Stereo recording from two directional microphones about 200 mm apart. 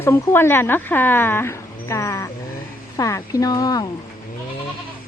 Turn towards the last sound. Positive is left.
turn(degrees=20)  # may be behind; listen again after turning